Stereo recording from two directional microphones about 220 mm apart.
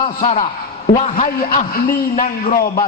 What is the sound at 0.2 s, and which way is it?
A man's voice, 40° left (ahead or behind).